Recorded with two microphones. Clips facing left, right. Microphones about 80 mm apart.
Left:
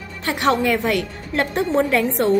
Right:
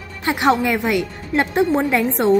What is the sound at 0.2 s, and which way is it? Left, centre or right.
A woman's voice, centre.